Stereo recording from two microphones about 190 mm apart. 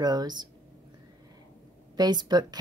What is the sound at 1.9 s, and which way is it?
Speech, 20° right (ahead or behind).